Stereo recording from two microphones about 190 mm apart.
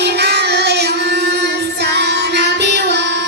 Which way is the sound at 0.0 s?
60° right (ahead or behind).